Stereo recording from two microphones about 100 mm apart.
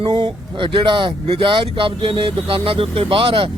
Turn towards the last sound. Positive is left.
turn(degrees=-65)  # may be behind; listen again after turning